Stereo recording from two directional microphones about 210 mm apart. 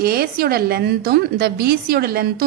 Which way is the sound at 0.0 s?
45° right (ahead or behind).